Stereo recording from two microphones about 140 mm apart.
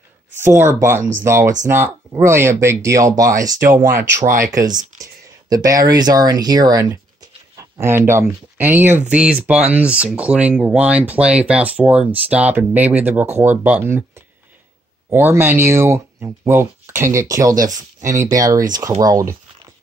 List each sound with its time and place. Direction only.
0.4 s speech: 15° right (ahead or behind)
3.4 s speech: 70° right (ahead or behind)
4.5 s speech: 25° right (ahead or behind)